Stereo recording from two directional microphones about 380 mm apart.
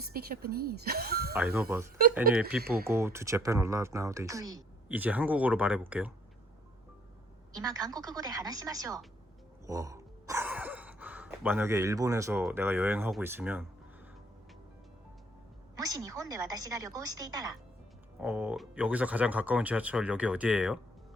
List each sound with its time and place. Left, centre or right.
0.1 s speech: right
1.3 s speech: centre
7.5 s speech: centre
15.7 s speech: centre